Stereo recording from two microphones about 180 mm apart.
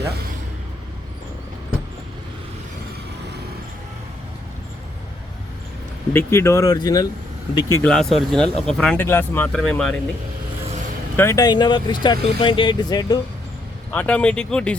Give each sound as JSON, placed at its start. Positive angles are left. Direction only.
{"t": 6.1, "sound": "speech", "side_deg": 15}
{"t": 7.9, "sound": "speech", "side_deg": 5}
{"t": 11.2, "sound": "speech", "side_deg": 20}
{"t": 13.9, "sound": "speech", "side_deg": 5}